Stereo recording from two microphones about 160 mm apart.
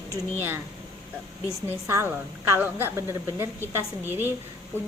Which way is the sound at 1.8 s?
15° right (ahead or behind).